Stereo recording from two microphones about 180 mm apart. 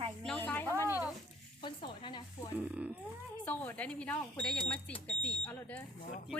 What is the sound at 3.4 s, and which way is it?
Speech, 10° left (ahead or behind).